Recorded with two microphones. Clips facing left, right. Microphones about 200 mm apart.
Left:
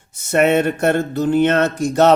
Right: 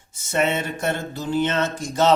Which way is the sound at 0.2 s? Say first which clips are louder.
Left 8 dB; 60° left (ahead or behind).